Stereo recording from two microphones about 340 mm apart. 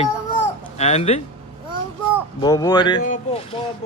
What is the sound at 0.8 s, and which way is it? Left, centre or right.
Speech, centre.